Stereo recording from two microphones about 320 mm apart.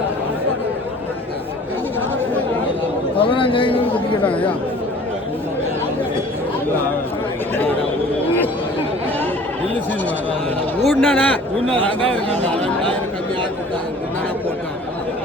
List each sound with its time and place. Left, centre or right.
3.2 s a man's voice: centre
4.2 s speech: centre
7.5 s a sound: centre
10.8 s speech: centre